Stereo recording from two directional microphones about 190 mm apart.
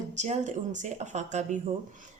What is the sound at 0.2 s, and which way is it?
Speech, 40° right (ahead or behind).